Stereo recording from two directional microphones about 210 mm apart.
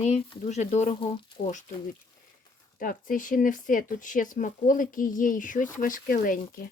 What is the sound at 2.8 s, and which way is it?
Speech, 40° left (ahead or behind).